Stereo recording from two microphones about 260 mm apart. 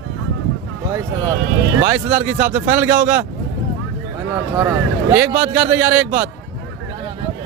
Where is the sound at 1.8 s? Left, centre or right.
Centre.